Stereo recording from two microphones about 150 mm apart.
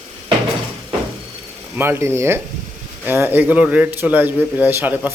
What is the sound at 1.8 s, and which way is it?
Speech, 15° right (ahead or behind).